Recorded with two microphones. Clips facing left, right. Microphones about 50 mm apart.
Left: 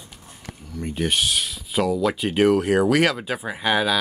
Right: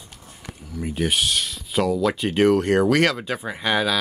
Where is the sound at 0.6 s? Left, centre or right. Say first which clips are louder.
Right 1 dB; centre.